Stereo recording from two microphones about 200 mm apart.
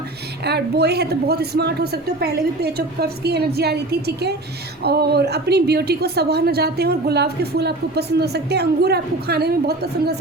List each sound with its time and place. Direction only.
0.4 s a woman's voice: 55° right (ahead or behind)